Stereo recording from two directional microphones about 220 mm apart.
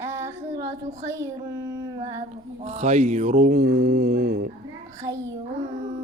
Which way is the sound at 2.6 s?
30° right (ahead or behind).